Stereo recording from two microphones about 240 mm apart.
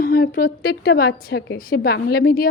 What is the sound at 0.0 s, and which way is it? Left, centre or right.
A woman's voice, left.